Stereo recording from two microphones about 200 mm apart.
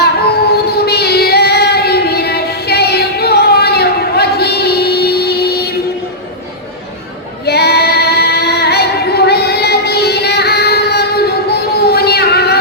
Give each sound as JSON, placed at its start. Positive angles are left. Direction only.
{"t": 0.0, "sound": "child singing", "side_deg": 55}
{"t": 7.4, "sound": "female singing", "side_deg": 55}